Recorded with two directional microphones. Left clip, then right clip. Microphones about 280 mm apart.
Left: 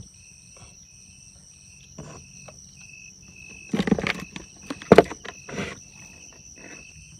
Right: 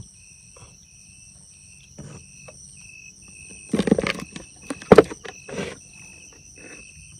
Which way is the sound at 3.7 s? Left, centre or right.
Centre.